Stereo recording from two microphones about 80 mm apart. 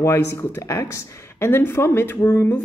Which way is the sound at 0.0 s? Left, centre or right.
Left.